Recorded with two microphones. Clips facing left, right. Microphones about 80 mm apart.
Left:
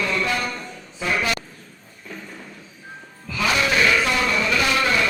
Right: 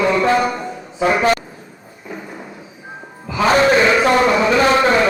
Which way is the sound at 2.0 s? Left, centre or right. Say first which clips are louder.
Right 6 dB; centre.